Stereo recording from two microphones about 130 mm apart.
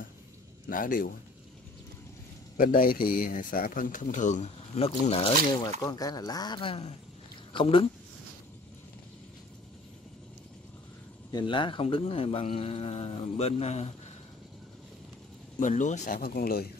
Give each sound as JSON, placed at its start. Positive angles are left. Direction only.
{"t": 0.7, "sound": "speech", "side_deg": 90}
{"t": 2.5, "sound": "speech", "side_deg": 90}
{"t": 5.0, "sound": "speech", "side_deg": 50}
{"t": 5.6, "sound": "speech", "side_deg": 30}
{"t": 11.3, "sound": "speech", "side_deg": 40}
{"t": 15.6, "sound": "speech", "side_deg": 70}